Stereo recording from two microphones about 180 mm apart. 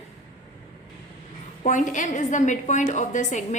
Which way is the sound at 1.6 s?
45° left (ahead or behind).